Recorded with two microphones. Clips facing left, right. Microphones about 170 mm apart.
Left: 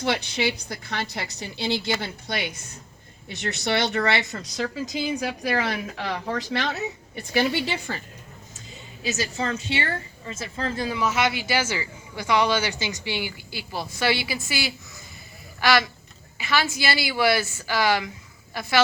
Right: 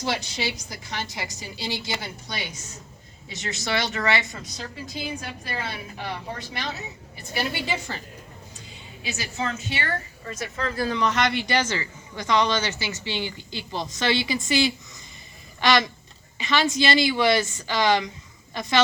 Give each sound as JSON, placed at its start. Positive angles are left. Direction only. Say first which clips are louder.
{"t": 0.0, "sound": "a woman's voice", "louder": "left 3 dB", "side_deg": 60}
{"t": 9.0, "sound": "a woman's voice", "louder": "left 3 dB", "side_deg": 40}
{"t": 9.6, "sound": "a woman's voice", "louder": "left 2 dB", "side_deg": 25}
{"t": 10.8, "sound": "a woman's voice", "louder": "right 1 dB", "side_deg": 5}